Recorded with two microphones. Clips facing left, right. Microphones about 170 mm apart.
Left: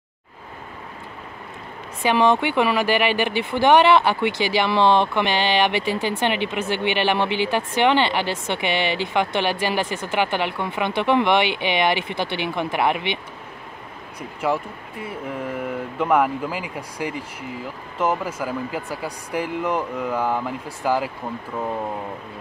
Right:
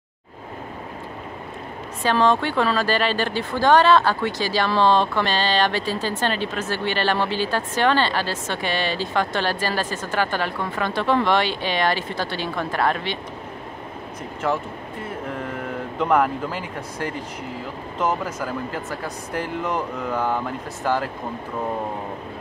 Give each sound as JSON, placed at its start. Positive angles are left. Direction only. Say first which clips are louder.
{"t": 2.0, "sound": "speech", "louder": "left 1 dB", "side_deg": 15}
{"t": 14.4, "sound": "speech", "louder": "left 1 dB", "side_deg": 10}